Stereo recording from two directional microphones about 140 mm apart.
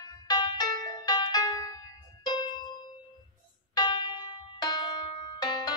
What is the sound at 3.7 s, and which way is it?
Music, 35° left (ahead or behind).